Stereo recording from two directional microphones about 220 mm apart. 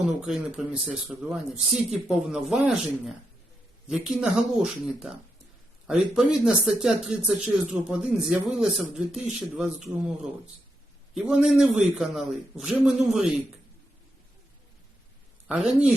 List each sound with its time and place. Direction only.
0.0 s speech: 5° right (ahead or behind)
3.8 s speech: 5° right (ahead or behind)
11.1 s speech: 5° right (ahead or behind)
15.4 s speech: 5° right (ahead or behind)